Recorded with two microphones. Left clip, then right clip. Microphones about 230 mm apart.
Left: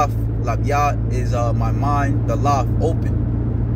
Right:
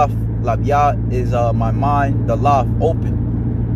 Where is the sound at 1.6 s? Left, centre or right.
Centre.